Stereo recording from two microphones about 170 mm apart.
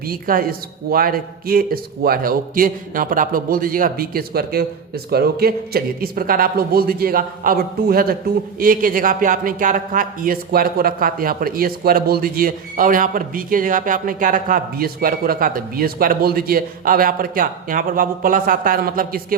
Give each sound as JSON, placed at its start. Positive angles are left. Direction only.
{"t": 0.1, "sound": "speech", "side_deg": -55}